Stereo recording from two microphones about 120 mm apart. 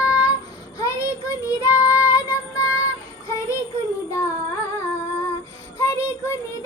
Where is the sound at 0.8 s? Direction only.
25° left (ahead or behind).